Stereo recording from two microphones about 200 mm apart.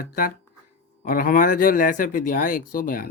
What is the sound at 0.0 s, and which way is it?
Speech, 45° left (ahead or behind).